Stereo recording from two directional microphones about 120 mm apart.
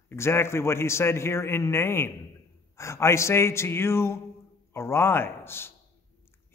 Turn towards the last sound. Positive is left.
turn(degrees=20)  # may be behind; listen again after turning